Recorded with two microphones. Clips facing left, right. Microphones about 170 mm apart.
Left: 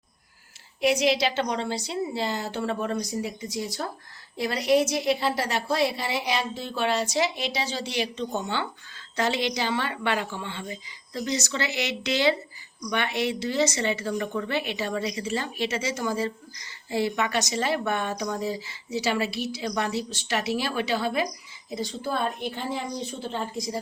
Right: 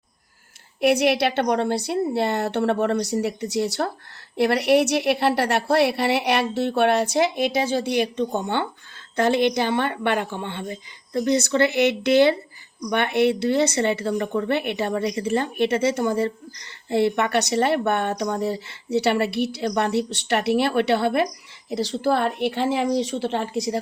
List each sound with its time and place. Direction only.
0.8 s a woman's voice: 60° right (ahead or behind)
21.7 s a woman's voice: 75° right (ahead or behind)